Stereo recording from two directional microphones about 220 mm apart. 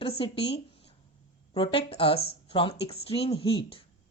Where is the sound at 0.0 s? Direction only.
25° left (ahead or behind).